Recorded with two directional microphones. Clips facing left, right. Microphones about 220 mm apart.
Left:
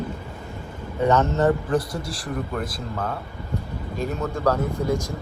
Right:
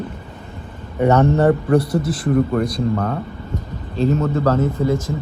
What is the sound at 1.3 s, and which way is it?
Speech, 30° right (ahead or behind).